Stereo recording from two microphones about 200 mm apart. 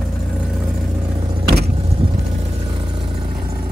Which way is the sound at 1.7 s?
30° right (ahead or behind).